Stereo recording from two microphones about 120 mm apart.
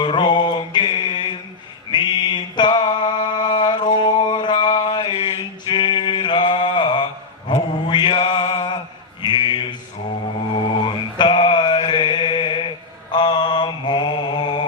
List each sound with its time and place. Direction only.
0.0 s mantra: 40° left (ahead or behind)
5.2 s a sound: 40° left (ahead or behind)
9.2 s mantra: 40° left (ahead or behind)